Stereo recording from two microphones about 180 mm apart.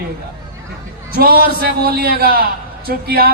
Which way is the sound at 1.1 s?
55° right (ahead or behind).